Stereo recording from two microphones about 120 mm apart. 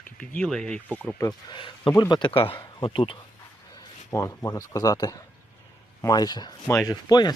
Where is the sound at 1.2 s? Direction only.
35° left (ahead or behind).